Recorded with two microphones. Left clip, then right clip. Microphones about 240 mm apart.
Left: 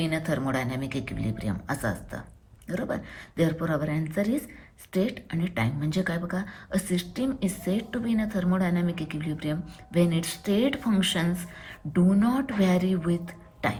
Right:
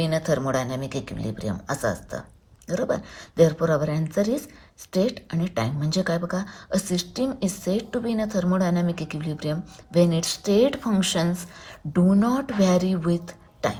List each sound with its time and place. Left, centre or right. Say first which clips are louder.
0.0 s speech: right 5 dB; centre
3.4 s speech: right 7 dB; centre